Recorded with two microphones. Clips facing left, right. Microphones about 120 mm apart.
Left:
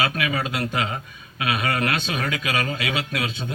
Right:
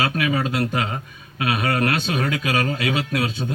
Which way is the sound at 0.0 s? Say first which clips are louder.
Right 3 dB; 40° right (ahead or behind).